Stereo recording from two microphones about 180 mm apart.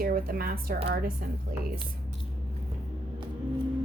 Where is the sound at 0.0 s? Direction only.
55° right (ahead or behind).